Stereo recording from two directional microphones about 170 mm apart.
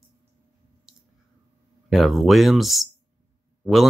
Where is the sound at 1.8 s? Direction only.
Centre (ahead or behind).